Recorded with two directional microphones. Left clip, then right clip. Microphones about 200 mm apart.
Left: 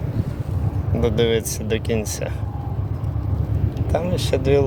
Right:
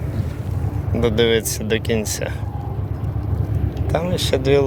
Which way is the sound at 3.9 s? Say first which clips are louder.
Right 2 dB; 10° left (ahead or behind).